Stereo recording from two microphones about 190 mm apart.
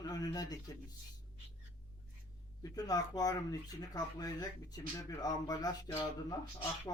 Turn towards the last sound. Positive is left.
turn(degrees=25)  # may be behind; listen again after turning